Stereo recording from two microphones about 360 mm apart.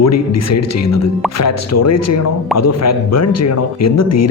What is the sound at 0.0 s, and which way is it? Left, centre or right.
A man's voice, left.